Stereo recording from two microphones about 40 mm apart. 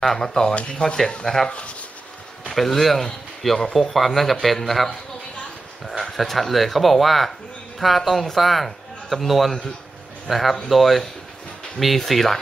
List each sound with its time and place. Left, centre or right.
0.0 s speech: centre
1.5 s speech: left
2.5 s a man's voice: centre
6.0 s a man's voice: centre